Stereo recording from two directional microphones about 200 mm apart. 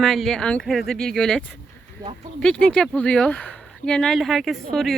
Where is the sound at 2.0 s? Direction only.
20° right (ahead or behind).